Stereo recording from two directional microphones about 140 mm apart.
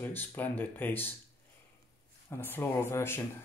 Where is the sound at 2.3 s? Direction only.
15° left (ahead or behind).